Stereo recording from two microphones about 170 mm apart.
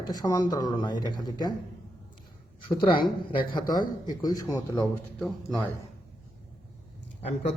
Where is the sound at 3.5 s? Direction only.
25° left (ahead or behind).